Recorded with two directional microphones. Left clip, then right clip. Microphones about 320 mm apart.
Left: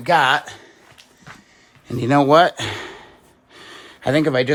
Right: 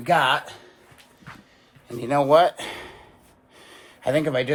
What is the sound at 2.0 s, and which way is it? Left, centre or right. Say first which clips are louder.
Speech: left 4 dB; left.